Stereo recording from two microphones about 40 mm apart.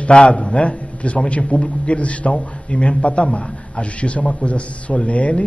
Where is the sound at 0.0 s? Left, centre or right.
Left.